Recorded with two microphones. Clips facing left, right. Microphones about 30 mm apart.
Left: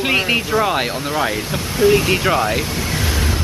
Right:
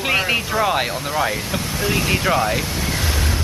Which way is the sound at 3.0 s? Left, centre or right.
Left.